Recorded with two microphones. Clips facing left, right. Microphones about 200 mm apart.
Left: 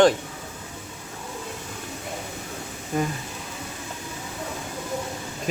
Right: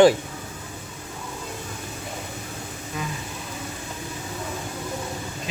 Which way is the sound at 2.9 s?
50° left (ahead or behind).